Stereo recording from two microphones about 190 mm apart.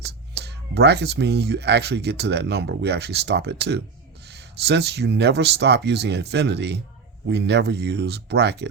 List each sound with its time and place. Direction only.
0.0 s speech: 60° right (ahead or behind)